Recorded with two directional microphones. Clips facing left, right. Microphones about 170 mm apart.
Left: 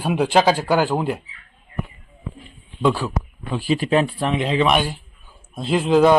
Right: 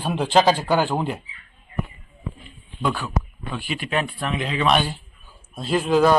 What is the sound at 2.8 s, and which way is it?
Speech, 30° left (ahead or behind).